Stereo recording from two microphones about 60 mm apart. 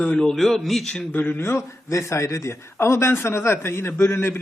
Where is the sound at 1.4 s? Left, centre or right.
Left.